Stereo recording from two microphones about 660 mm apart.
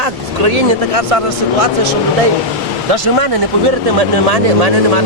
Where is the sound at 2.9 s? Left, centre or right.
Right.